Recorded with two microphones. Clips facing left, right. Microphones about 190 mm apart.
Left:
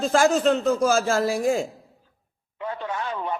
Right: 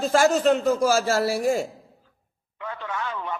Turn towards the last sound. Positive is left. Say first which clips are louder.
# left 2 dB
turn(degrees=30)  # may be behind; listen again after turning